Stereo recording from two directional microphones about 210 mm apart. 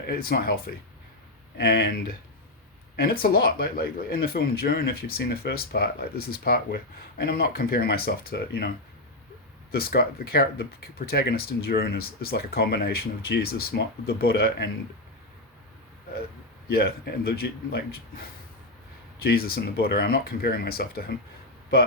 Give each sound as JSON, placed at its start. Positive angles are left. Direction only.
{"t": 0.1, "sound": "speech", "side_deg": 45}
{"t": 9.7, "sound": "speech", "side_deg": 45}
{"t": 16.6, "sound": "speech", "side_deg": 45}